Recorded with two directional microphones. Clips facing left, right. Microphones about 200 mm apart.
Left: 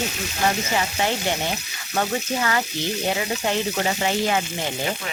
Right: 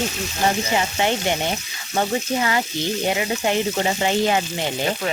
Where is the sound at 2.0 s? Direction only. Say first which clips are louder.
Right 2 dB; 15° right (ahead or behind).